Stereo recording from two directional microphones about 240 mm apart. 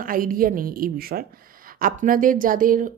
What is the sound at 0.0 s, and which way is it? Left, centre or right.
A woman's voice, right.